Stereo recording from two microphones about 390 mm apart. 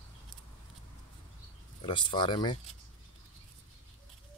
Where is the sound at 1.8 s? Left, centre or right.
Centre.